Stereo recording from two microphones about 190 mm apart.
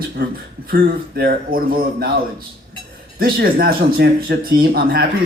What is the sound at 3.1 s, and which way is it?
Speech, 50° right (ahead or behind).